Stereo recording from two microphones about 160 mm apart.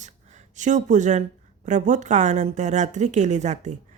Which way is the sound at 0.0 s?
50° right (ahead or behind).